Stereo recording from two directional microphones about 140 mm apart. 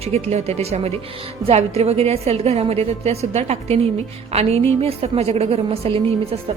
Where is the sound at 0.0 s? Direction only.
50° right (ahead or behind).